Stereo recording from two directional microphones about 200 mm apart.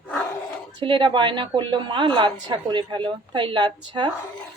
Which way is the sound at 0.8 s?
25° right (ahead or behind).